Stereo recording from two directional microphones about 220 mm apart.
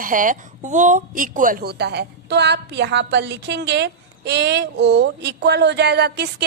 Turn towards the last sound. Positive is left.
turn(degrees=-50)  # may be behind; listen again after turning